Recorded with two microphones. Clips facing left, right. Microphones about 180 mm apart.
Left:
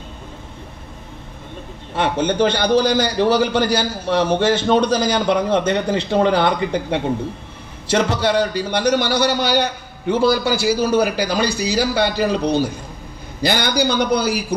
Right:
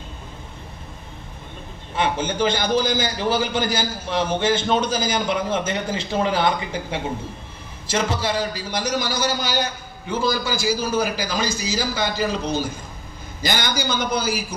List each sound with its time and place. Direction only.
2.0 s a man's voice: 65° left (ahead or behind)